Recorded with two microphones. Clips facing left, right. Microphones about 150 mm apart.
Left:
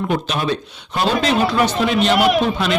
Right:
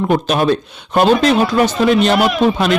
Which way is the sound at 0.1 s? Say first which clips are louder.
Right 8 dB; 50° right (ahead or behind).